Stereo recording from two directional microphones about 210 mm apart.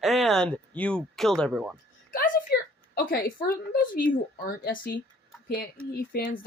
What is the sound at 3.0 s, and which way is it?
A woman's voice, 40° left (ahead or behind).